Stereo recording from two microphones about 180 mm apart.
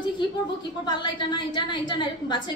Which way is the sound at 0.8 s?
25° left (ahead or behind).